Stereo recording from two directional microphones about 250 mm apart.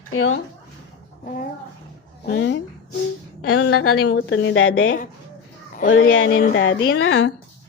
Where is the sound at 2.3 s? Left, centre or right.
Left.